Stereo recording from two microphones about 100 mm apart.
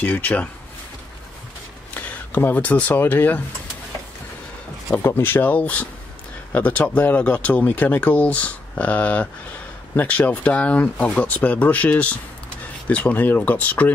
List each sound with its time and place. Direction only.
0.0 s speech: 15° left (ahead or behind)
2.0 s speech: 20° left (ahead or behind)
4.9 s speech: 20° left (ahead or behind)